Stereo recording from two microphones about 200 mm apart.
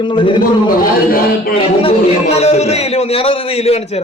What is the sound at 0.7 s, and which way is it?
Speech, 45° left (ahead or behind).